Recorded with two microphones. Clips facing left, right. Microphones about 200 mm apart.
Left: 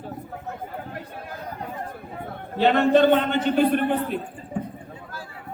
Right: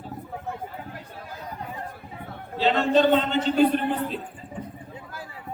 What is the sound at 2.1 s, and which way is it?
A man's voice, 55° left (ahead or behind).